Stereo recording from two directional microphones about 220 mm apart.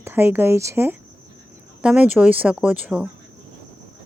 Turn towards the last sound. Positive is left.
turn(degrees=-5)  # may be behind; listen again after turning